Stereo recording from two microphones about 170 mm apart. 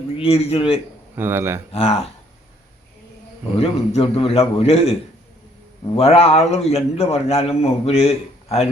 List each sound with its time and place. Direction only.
0.2 s a man's voice: 35° left (ahead or behind)
1.1 s speech: 15° right (ahead or behind)
1.7 s a man's voice: 35° left (ahead or behind)
3.6 s a man's voice: 35° left (ahead or behind)
6.0 s a man's voice: 35° left (ahead or behind)